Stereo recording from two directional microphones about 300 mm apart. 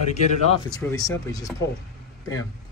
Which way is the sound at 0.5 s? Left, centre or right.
Centre.